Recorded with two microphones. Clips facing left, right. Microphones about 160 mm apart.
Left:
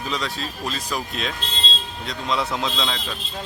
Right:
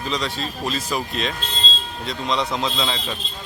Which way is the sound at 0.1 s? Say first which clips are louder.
Right 3 dB; centre (ahead or behind).